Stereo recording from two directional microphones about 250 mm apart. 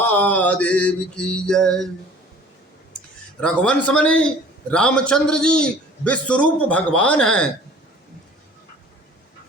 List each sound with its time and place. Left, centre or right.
0.0 s a man's voice: centre
3.4 s a man's voice: centre